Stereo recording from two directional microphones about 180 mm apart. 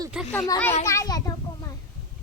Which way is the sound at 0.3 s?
15° left (ahead or behind).